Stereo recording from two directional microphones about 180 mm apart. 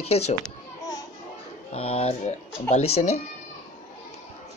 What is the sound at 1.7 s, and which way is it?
Speech, 35° left (ahead or behind).